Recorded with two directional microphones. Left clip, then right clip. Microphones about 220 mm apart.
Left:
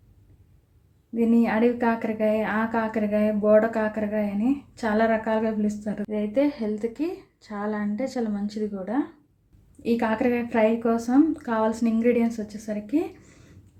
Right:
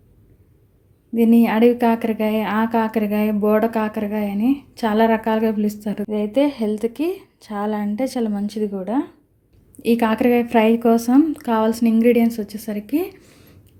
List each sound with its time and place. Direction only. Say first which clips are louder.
1.1 s a woman's voice: right 6 dB; 40° right (ahead or behind)